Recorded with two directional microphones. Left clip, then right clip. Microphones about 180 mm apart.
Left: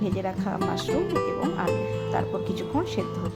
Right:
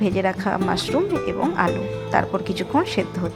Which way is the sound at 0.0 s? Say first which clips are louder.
Right 8 dB; 15° right (ahead or behind).